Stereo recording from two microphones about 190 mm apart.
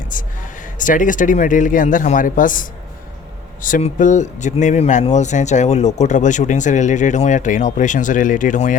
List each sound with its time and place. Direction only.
0.1 s speech: 45° left (ahead or behind)